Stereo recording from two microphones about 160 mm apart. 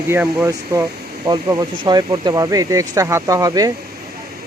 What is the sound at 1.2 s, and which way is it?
Speech, 25° right (ahead or behind).